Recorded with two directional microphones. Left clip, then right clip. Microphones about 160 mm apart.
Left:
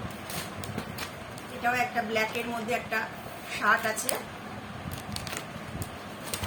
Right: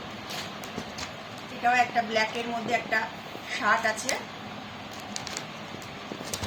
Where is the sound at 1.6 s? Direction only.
15° left (ahead or behind).